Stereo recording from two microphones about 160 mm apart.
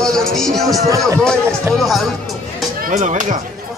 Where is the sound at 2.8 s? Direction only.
55° right (ahead or behind).